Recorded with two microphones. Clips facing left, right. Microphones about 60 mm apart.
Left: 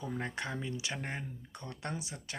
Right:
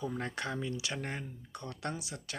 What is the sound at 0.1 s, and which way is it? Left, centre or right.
Speech, centre.